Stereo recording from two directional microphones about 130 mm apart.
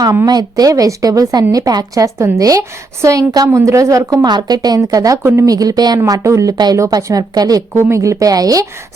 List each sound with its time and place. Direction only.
0.0 s a woman's voice: 25° right (ahead or behind)